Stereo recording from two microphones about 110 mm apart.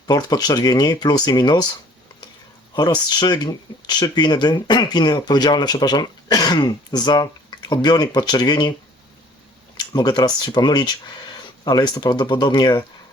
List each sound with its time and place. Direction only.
0.1 s speech: 35° left (ahead or behind)
2.7 s speech: 35° left (ahead or behind)
9.7 s speech: 40° left (ahead or behind)